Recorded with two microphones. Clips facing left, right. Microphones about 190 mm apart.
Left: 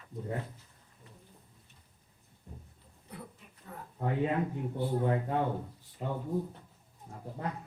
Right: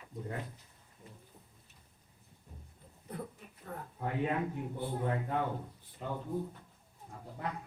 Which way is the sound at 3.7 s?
50° right (ahead or behind).